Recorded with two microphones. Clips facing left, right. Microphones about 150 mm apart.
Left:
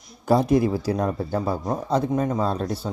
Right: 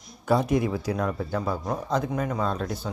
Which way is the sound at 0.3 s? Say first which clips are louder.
Left 4 dB; 35° left (ahead or behind).